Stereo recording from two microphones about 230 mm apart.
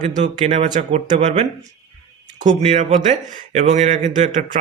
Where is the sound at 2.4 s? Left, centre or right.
Right.